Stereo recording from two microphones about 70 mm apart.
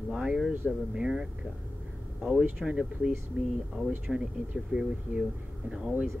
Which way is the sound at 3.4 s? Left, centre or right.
Centre.